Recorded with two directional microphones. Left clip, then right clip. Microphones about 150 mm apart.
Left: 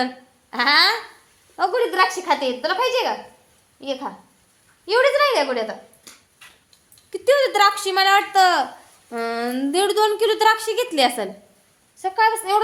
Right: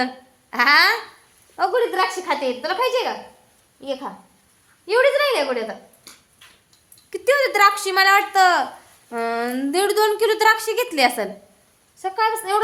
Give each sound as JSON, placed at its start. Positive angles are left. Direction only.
{"t": 0.5, "sound": "speech", "side_deg": -20}
{"t": 1.5, "sound": "a woman's voice", "side_deg": -10}
{"t": 7.1, "sound": "a woman's voice", "side_deg": -15}